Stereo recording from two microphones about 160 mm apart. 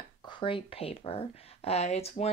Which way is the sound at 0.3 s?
30° left (ahead or behind).